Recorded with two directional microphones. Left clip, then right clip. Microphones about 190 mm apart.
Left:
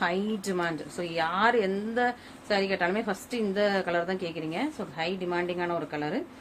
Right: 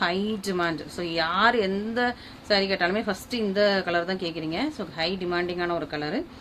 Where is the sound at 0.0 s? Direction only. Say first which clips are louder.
Right 2 dB; 25° right (ahead or behind).